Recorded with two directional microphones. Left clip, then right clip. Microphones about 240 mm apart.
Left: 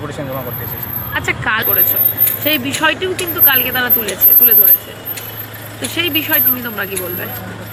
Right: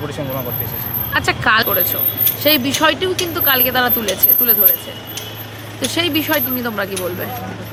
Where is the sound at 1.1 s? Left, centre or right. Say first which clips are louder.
Right 2 dB; right.